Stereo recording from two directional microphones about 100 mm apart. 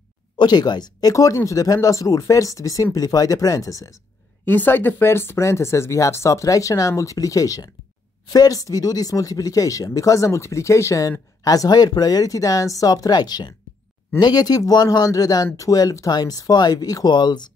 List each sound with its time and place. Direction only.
0.4 s speech: 45° left (ahead or behind)
4.5 s speech: 20° left (ahead or behind); by 17.5 s 45° left (ahead or behind)